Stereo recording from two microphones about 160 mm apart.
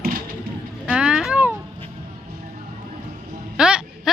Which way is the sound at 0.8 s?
5° right (ahead or behind).